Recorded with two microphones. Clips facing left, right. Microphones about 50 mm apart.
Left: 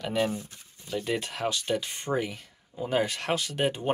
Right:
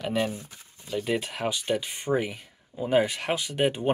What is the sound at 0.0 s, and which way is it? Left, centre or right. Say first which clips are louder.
Speech: even; centre.